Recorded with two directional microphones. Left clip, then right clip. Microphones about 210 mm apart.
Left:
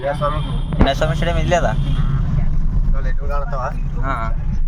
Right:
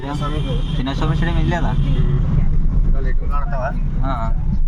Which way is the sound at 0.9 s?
5° left (ahead or behind).